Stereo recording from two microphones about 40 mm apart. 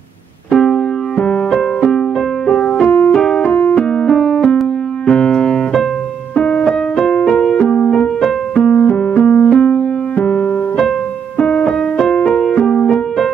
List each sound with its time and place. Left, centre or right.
0.5 s keyboard: centre
1.2 s music: left
2.8 s keyboard: left
3.2 s keyboard: left
3.5 s keyboard: left
3.9 s keyboard: centre
5.0 s piano: centre
6.3 s keyboard: left
7.1 s music: left
8.5 s keyboard: left
9.2 s music: left